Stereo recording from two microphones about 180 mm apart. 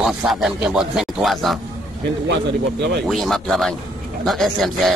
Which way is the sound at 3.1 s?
Centre (ahead or behind).